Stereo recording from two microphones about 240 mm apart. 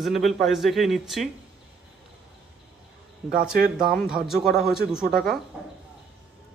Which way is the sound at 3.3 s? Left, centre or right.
Right.